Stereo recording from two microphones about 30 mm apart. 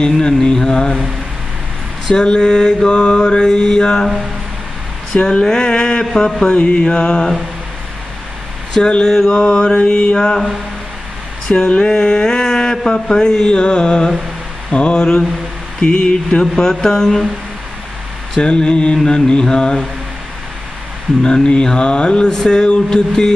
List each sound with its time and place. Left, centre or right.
0.6 s mantra: left
2.0 s mantra: left
3.4 s mantra: centre
5.1 s mantra: left
8.8 s mantra: left
10.1 s mantra: left
11.4 s a sound: left
12.8 s mantra: left
16.3 s mantra: left
18.4 s mantra: left
21.2 s mantra: left